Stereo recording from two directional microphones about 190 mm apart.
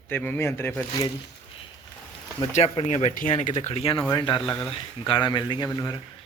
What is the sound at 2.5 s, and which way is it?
Speech, 30° left (ahead or behind).